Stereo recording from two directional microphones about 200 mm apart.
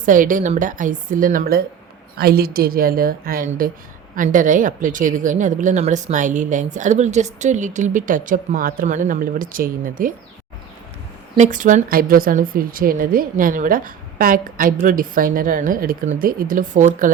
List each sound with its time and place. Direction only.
0.0 s a woman's voice: 40° right (ahead or behind)
11.3 s a woman's voice: 40° right (ahead or behind)